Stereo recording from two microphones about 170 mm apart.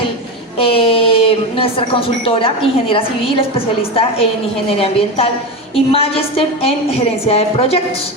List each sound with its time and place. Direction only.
0.6 s speech: 35° left (ahead or behind)
4.8 s speech: 35° left (ahead or behind)